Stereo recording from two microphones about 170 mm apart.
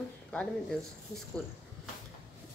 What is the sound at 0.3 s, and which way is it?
Speech, 5° left (ahead or behind).